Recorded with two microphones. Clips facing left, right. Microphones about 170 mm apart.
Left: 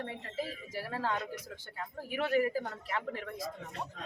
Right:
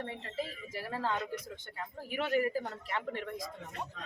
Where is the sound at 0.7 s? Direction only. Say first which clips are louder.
Even; 5° left (ahead or behind).